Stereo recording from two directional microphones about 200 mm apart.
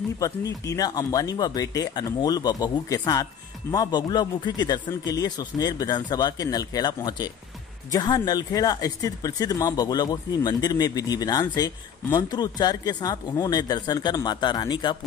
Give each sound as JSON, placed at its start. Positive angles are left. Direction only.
{"t": 0.2, "sound": "speech", "side_deg": 15}